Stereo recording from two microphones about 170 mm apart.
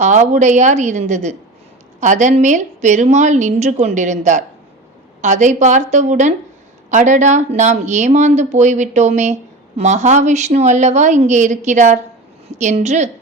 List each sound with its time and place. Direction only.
0.0 s a woman's voice: 45° right (ahead or behind)